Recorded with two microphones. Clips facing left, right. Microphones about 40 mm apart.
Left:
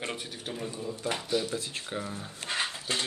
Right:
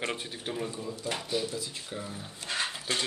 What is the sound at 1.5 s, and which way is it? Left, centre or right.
Speech, left.